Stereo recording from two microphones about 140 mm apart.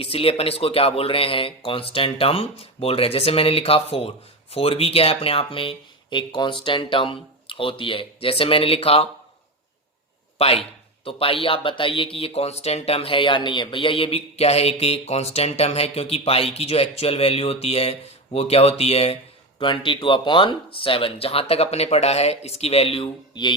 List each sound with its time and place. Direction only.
0.0 s a man's voice: 45° left (ahead or behind)
10.3 s a man's voice: 45° left (ahead or behind)